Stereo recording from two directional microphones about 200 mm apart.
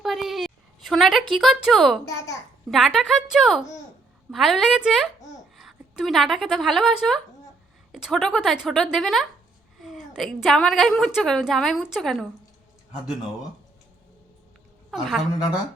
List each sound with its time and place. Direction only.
0.0 s a sound: centre (ahead or behind)
2.6 s a woman's voice: centre (ahead or behind)
14.8 s a woman's voice: centre (ahead or behind)